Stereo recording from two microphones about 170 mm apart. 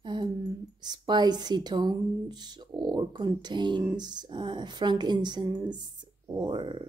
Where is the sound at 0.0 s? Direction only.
25° right (ahead or behind).